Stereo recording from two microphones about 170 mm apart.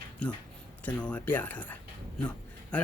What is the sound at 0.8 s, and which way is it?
Speech, 10° left (ahead or behind).